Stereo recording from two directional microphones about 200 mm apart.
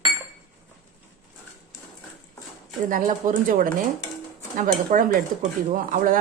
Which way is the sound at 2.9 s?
40° right (ahead or behind).